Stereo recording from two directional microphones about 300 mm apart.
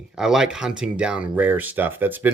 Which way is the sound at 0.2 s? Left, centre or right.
Centre.